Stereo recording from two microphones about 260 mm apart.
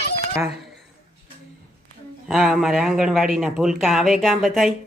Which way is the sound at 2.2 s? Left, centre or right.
Centre.